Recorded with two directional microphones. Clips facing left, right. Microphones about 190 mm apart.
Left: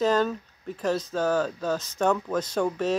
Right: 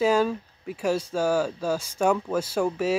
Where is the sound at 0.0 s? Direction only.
10° right (ahead or behind).